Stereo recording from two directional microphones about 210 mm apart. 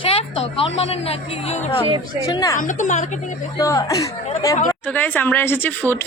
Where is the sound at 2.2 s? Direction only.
15° left (ahead or behind).